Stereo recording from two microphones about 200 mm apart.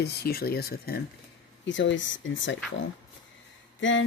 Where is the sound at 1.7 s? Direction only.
65° left (ahead or behind).